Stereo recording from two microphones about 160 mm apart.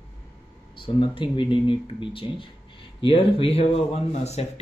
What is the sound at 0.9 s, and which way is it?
Speech, 30° left (ahead or behind).